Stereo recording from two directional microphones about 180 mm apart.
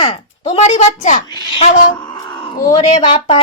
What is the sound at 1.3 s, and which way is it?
Cat, 25° left (ahead or behind).